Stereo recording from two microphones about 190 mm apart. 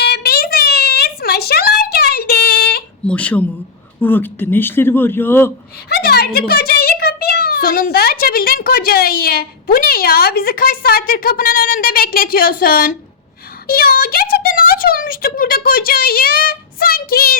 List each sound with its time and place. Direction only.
0.0 s a sound: 55° left (ahead or behind)
3.1 s speech: 5° left (ahead or behind)
5.9 s a child's voice: 55° left (ahead or behind)